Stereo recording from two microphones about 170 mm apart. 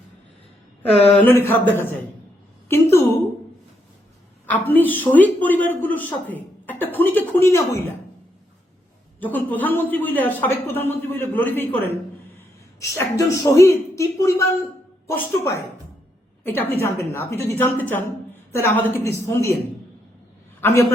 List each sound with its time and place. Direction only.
1.1 s a man's voice: 10° left (ahead or behind)
2.6 s a sound: 15° left (ahead or behind)
4.4 s a man's voice: 10° left (ahead or behind)
9.2 s a man's voice: 10° left (ahead or behind)
20.6 s a man's voice: 15° left (ahead or behind)